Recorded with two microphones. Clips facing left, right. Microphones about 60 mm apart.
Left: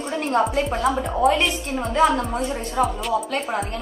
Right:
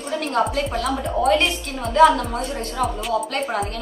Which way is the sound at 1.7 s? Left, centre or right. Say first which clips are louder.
Right 5 dB; left.